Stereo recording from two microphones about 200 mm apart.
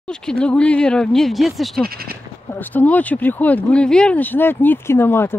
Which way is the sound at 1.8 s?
50° right (ahead or behind).